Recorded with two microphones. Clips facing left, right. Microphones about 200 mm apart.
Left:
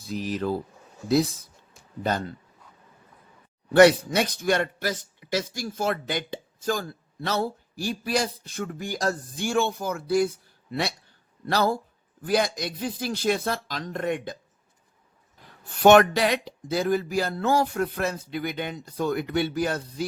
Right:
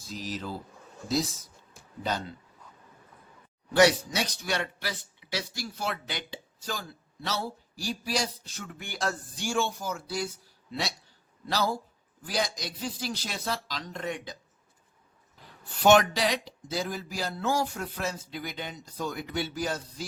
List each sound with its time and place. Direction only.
0.0 s speech: 60° left (ahead or behind)
3.7 s a man's voice: 55° left (ahead or behind)
9.4 s speech: 60° left (ahead or behind)
15.8 s speech: 55° left (ahead or behind)